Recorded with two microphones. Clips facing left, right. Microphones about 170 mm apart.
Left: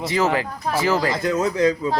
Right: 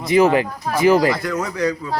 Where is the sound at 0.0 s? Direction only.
15° right (ahead or behind).